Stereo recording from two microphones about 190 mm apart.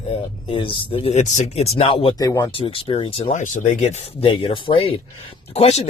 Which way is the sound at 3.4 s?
40° left (ahead or behind).